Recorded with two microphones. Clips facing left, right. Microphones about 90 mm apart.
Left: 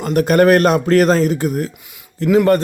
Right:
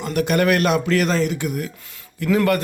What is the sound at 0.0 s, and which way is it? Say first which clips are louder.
A man's voice: left 6 dB; 40° left (ahead or behind).